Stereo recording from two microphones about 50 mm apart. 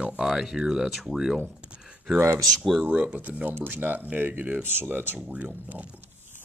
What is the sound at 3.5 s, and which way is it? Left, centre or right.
Speech, right.